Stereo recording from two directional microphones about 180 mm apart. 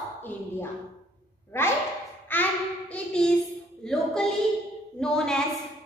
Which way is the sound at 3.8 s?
Centre (ahead or behind).